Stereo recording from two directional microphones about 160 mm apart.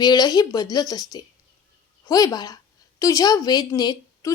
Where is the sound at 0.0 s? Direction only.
25° left (ahead or behind).